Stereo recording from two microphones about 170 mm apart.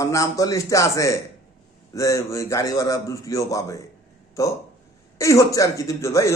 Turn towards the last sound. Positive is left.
turn(degrees=20)  # may be behind; listen again after turning